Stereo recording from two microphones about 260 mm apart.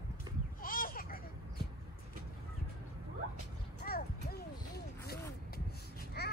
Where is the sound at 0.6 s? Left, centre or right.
Left.